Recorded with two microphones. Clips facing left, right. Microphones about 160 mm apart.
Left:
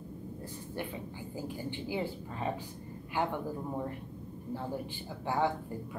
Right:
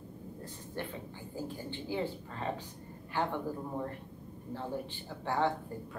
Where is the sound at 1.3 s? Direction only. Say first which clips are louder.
Left 1 dB; 15° left (ahead or behind).